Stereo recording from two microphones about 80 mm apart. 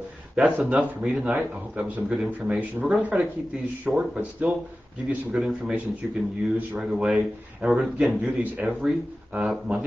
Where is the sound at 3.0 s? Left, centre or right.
Centre.